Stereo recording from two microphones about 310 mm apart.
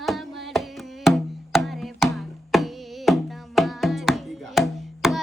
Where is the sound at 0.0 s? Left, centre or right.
Centre.